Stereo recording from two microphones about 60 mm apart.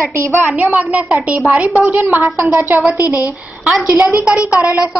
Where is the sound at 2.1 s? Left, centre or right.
Right.